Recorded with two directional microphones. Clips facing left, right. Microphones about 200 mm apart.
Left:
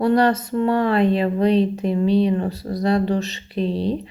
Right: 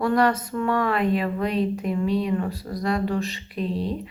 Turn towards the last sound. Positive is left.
turn(degrees=30)  # may be behind; listen again after turning